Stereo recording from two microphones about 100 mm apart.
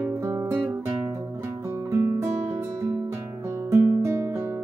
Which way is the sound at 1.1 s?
25° right (ahead or behind).